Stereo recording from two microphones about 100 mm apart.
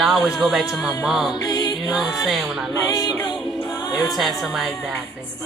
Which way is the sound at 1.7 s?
Centre (ahead or behind).